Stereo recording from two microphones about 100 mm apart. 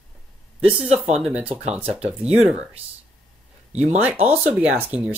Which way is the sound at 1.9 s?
10° right (ahead or behind).